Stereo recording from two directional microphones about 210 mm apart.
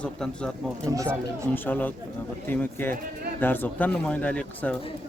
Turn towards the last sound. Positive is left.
turn(degrees=5)  # may be behind; listen again after turning